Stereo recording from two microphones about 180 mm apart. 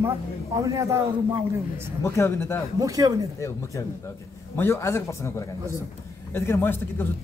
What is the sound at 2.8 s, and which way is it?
Speech, 20° right (ahead or behind).